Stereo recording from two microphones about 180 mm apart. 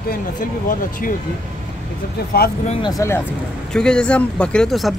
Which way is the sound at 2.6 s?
35° left (ahead or behind).